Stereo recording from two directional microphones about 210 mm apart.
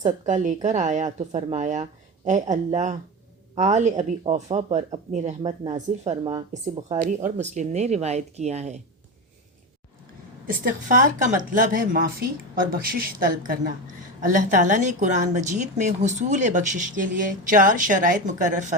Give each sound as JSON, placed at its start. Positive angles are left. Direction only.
{"t": 0.0, "sound": "a woman's voice", "side_deg": -35}
{"t": 10.4, "sound": "a woman's voice", "side_deg": -40}